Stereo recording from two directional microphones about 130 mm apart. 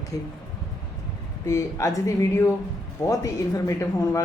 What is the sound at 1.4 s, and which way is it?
A woman's voice, 20° left (ahead or behind).